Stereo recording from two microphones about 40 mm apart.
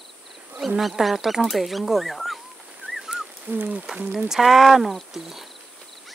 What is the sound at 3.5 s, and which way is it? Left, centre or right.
Speech, right.